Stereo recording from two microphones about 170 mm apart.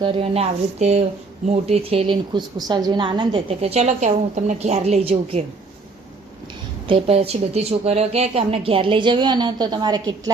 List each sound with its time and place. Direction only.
0.0 s a woman's voice: 35° right (ahead or behind)
6.8 s a woman's voice: 35° right (ahead or behind)